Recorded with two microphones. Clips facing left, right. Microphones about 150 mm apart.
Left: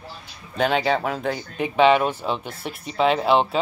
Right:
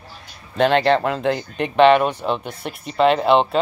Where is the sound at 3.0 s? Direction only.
Centre (ahead or behind).